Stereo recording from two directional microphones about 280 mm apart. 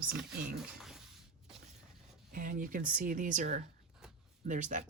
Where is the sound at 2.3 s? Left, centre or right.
Right.